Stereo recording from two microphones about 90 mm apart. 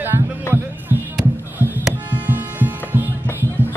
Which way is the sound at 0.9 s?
30° right (ahead or behind).